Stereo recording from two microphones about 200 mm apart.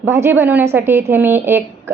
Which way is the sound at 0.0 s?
10° right (ahead or behind).